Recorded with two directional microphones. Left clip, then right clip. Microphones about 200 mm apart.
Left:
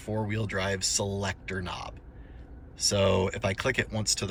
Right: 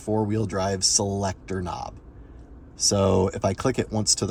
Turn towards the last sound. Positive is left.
turn(degrees=-20)  # may be behind; listen again after turning